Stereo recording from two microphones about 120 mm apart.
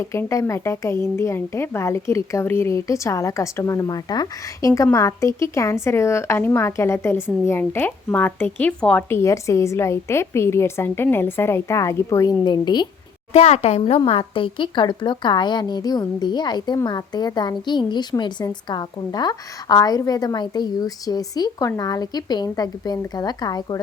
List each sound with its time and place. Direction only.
0.0 s speech: 25° left (ahead or behind)
9.0 s speech: 25° left (ahead or behind)
13.3 s a woman's voice: 65° left (ahead or behind); by 23.8 s 35° left (ahead or behind)